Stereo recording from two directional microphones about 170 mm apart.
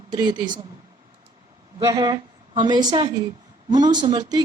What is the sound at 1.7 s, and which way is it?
A woman's voice, 20° right (ahead or behind).